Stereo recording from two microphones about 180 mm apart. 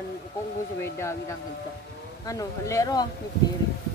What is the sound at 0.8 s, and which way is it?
Speech, 15° left (ahead or behind).